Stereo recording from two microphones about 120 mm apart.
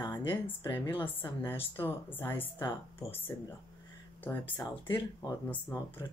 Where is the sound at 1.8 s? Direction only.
15° left (ahead or behind).